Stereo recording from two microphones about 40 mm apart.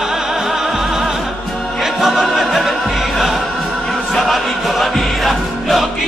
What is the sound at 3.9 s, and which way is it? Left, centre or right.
Chant, centre.